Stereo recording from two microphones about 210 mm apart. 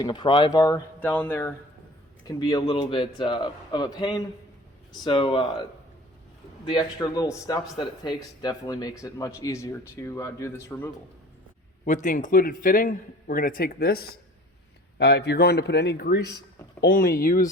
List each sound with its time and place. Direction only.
0.0 s a man's voice: 20° left (ahead or behind)
0.9 s a man's voice: 10° left (ahead or behind)
5.0 s a man's voice: 25° left (ahead or behind)
6.7 s a man's voice: 20° left (ahead or behind)
11.9 s a man's voice: 35° left (ahead or behind)